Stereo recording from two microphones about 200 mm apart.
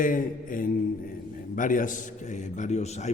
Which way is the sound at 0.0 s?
45° left (ahead or behind).